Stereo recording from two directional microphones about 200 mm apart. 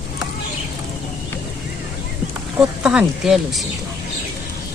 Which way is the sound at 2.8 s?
5° right (ahead or behind).